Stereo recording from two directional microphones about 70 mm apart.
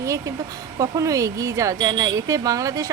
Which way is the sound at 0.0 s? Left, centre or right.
Right.